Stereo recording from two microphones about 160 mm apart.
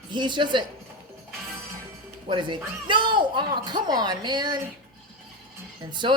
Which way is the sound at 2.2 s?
30° right (ahead or behind).